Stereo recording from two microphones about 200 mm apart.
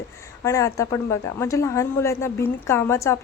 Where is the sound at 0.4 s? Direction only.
15° left (ahead or behind).